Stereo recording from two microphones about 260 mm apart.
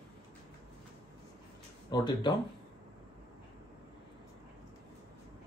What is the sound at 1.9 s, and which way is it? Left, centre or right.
Speech, centre.